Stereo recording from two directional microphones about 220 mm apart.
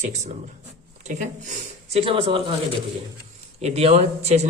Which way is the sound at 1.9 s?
25° right (ahead or behind).